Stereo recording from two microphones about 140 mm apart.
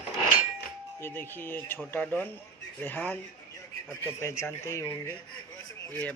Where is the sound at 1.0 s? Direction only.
15° left (ahead or behind).